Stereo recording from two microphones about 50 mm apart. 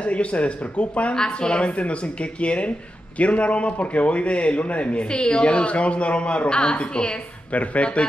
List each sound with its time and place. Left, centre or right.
0.0 s a man's voice: left